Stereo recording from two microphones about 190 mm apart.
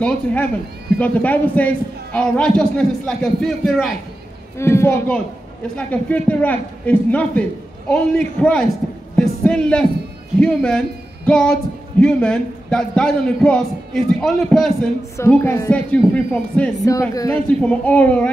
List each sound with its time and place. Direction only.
0.0 s a man's voice: 5° left (ahead or behind)
4.6 s a man's voice: 15° left (ahead or behind)
15.1 s a man's voice: 15° left (ahead or behind)
16.8 s a man's voice: 20° left (ahead or behind)